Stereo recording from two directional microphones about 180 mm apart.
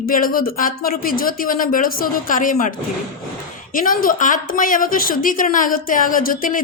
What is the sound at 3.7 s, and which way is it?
A woman's voice, 50° left (ahead or behind).